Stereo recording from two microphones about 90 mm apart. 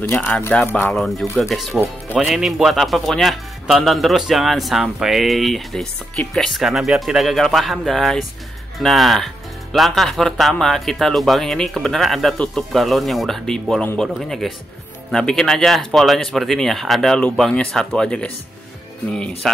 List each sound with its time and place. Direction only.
0.1 s speech: 25° left (ahead or behind)
0.9 s speech: centre (ahead or behind)
1.2 s speech: 30° left (ahead or behind)
1.5 s speech: centre (ahead or behind)